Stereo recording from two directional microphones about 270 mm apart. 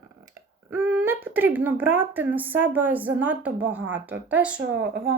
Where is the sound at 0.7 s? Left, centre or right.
Centre.